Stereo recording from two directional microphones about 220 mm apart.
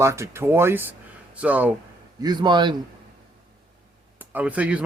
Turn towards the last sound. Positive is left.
turn(degrees=-5)  # may be behind; listen again after turning